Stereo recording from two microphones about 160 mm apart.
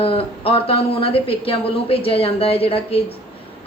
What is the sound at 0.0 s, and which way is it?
A woman's voice, 35° left (ahead or behind).